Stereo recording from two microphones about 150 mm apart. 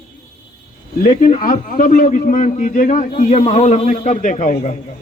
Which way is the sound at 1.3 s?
60° left (ahead or behind).